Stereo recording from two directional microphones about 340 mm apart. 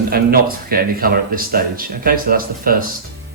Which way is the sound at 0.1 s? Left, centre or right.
Right.